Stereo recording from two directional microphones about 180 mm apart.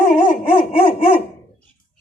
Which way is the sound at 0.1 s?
55° left (ahead or behind).